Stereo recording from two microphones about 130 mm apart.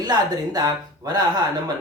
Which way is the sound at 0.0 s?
30° right (ahead or behind).